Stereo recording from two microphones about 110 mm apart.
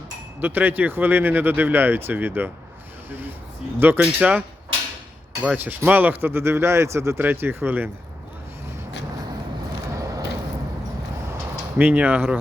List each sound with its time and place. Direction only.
0.3 s speech: 15° right (ahead or behind)
9.9 s vehicle: 30° right (ahead or behind)
11.8 s speech: 15° right (ahead or behind)